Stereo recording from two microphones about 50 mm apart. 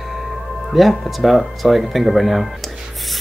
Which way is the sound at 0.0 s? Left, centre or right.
Centre.